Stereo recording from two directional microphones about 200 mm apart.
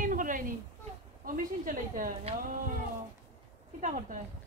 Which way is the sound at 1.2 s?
45° right (ahead or behind).